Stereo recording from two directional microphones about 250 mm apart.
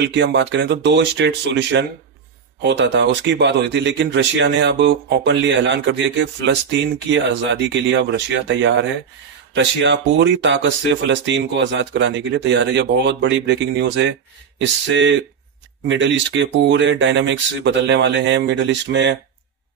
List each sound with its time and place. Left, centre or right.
0.0 s speech: right